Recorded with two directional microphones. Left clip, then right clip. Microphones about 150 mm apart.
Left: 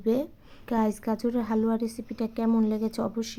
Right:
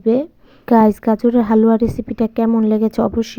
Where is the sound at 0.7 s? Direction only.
50° right (ahead or behind).